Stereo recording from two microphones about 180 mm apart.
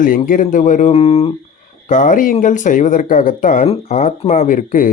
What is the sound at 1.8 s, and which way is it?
Speech, 45° left (ahead or behind).